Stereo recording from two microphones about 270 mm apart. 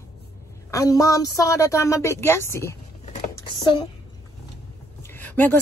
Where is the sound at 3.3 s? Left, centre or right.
Centre.